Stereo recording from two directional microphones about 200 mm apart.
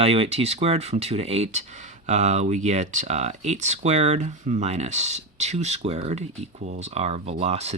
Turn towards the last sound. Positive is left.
turn(degrees=-30)  # may be behind; listen again after turning